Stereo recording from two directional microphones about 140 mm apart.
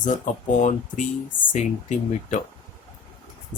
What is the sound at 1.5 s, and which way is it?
Speech, 60° left (ahead or behind).